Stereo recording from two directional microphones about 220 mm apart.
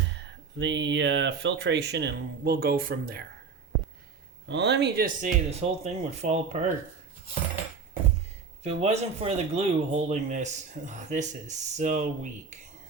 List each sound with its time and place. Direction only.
0.6 s speech: 55° right (ahead or behind)
4.4 s speech: 50° right (ahead or behind); by 6.7 s 30° right (ahead or behind)
8.6 s speech: 30° right (ahead or behind)